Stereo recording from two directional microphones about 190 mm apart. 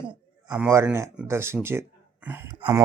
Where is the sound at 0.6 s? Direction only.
10° right (ahead or behind).